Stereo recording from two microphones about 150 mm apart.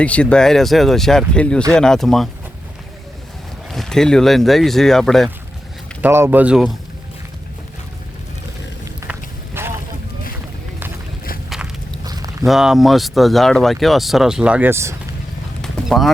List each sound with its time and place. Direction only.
0.0 s speech: 10° left (ahead or behind)
3.7 s speech: centre (ahead or behind)
6.0 s speech: 15° right (ahead or behind)
9.6 s vehicle: 15° right (ahead or behind)
11.4 s walk: centre (ahead or behind)
12.0 s a sound: 25° right (ahead or behind)
12.5 s speech: centre (ahead or behind)
15.6 s clip-clop: centre (ahead or behind)